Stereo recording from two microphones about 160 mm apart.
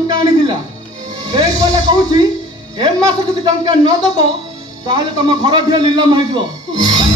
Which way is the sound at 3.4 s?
25° right (ahead or behind).